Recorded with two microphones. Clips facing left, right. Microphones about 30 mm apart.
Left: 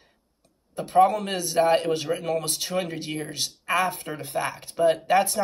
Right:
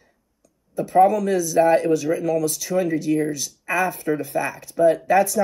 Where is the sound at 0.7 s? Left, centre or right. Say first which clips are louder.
Right 3 dB; left.